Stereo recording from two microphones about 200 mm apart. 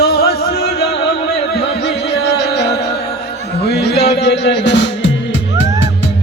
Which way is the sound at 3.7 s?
55° left (ahead or behind).